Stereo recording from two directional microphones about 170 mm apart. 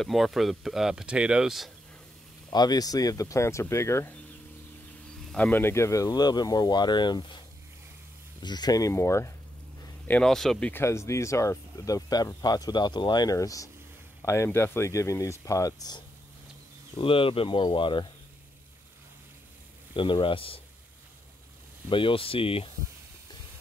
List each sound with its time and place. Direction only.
0.0 s speech: centre (ahead or behind)
2.5 s speech: 25° left (ahead or behind)
5.3 s speech: 10° left (ahead or behind)
10.7 s speech: 15° left (ahead or behind)
16.9 s speech: 30° left (ahead or behind)
19.9 s speech: 30° left (ahead or behind)
21.8 s speech: 30° left (ahead or behind)